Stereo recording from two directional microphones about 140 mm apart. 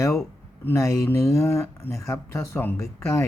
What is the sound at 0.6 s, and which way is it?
Speech, 20° left (ahead or behind).